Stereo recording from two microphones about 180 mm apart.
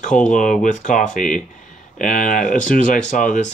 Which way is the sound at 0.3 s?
45° left (ahead or behind).